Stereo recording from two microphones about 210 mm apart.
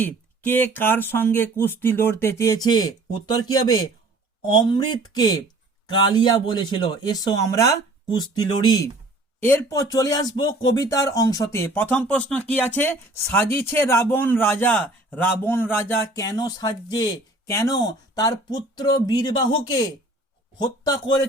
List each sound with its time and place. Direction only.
0.0 s speech: 10° left (ahead or behind)